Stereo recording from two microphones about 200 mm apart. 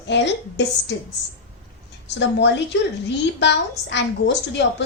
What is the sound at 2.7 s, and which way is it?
A woman's voice, 65° left (ahead or behind).